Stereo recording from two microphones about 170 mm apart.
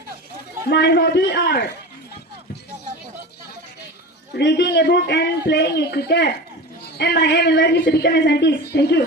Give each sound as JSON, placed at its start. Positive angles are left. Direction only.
{"t": 0.7, "sound": "a woman's voice", "side_deg": 80}
{"t": 4.4, "sound": "a woman's voice", "side_deg": 85}